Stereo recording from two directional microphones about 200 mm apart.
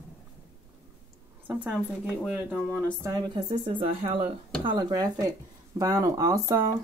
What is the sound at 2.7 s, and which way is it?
Speech, 15° right (ahead or behind).